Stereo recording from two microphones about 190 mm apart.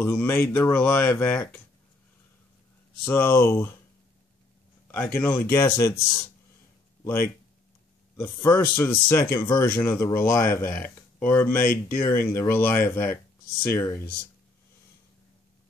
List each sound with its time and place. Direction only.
0.0 s speech: 10° left (ahead or behind)
3.1 s speech: 10° left (ahead or behind)
4.9 s speech: 10° left (ahead or behind)
8.2 s speech: 10° left (ahead or behind)
11.4 s speech: 45° left (ahead or behind)
11.9 s speech: 15° left (ahead or behind)